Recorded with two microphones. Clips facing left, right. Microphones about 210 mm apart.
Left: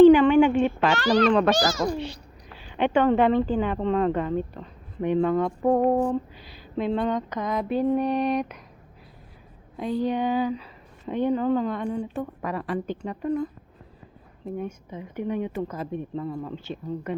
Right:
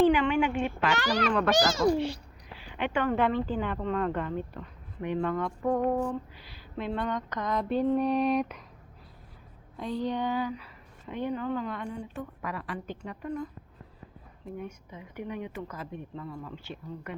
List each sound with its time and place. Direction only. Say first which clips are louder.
0.0 s a sound: left 10 dB; 30° left (ahead or behind)
0.9 s speech: left 10 dB; 10° right (ahead or behind)
1.5 s a child's voice: right 1 dB; 25° right (ahead or behind)
2.7 s speech: left 7 dB; 25° left (ahead or behind)
5.5 s a woman's voice: left 6 dB; 35° left (ahead or behind)
6.7 s speech: left 7 dB; 20° left (ahead or behind)
7.3 s a sound: left 3 dB; 10° left (ahead or behind)
9.7 s speech: left 5 dB; 10° left (ahead or behind)
11.0 s a woman's voice: left 8 dB; 25° left (ahead or behind)
14.6 s speech: left 7 dB; 25° left (ahead or behind)